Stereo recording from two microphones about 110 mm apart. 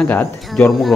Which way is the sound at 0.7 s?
Centre (ahead or behind).